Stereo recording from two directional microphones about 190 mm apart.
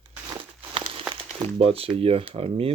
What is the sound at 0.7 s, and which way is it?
Crumpling, 30° right (ahead or behind).